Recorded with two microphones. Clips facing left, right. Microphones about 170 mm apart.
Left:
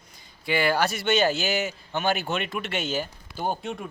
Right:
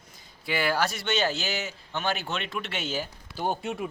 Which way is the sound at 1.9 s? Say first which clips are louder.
Left 3 dB; 10° left (ahead or behind).